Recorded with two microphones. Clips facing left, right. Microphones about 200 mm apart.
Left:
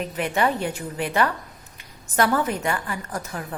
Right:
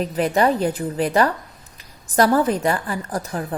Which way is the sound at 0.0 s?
35° right (ahead or behind).